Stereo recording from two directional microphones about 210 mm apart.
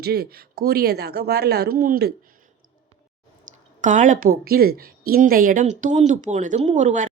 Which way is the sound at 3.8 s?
35° right (ahead or behind).